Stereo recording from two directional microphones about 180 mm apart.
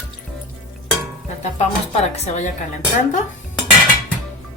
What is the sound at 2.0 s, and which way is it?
Speech, 35° left (ahead or behind).